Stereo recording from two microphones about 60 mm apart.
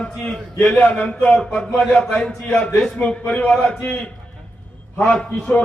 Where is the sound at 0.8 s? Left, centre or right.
Left.